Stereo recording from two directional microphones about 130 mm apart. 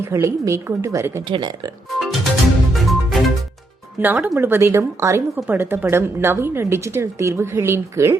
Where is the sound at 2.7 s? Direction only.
Centre (ahead or behind).